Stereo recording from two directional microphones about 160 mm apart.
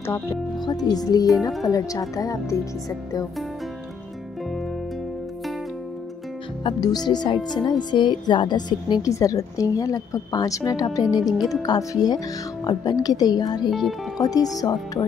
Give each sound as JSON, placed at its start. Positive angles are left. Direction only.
{"t": 0.0, "sound": "a woman's voice", "side_deg": 15}
{"t": 6.6, "sound": "a woman's voice", "side_deg": 25}
{"t": 13.7, "sound": "speech", "side_deg": 0}
{"t": 14.1, "sound": "a woman's voice", "side_deg": 25}